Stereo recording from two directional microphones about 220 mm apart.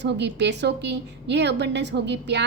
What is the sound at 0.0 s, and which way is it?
A woman's voice, 50° right (ahead or behind).